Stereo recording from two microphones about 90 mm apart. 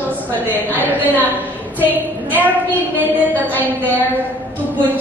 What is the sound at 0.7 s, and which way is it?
Speech, 20° right (ahead or behind).